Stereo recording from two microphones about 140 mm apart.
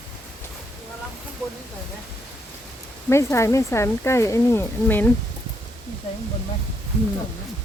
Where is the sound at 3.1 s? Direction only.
20° left (ahead or behind).